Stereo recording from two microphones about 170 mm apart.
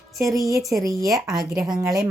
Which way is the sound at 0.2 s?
20° right (ahead or behind).